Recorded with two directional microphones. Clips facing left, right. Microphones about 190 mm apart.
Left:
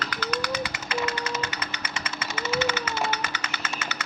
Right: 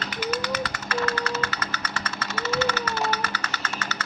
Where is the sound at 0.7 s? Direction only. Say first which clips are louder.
Right 2 dB; 20° left (ahead or behind).